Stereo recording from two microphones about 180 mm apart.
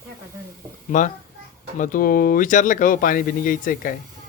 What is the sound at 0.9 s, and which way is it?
Speech, 45° left (ahead or behind).